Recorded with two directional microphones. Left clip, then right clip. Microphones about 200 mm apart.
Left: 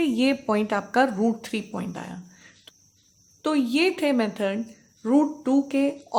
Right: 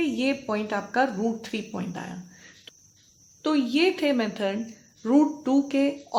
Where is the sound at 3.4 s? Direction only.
25° left (ahead or behind).